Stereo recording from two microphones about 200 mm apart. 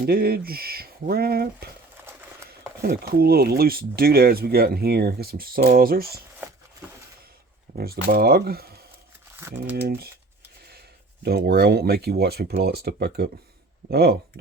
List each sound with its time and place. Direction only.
0.0 s speech: 50° right (ahead or behind)
7.7 s speech: 45° right (ahead or behind)
9.4 s speech: 10° right (ahead or behind)
9.8 s speech: 50° right (ahead or behind)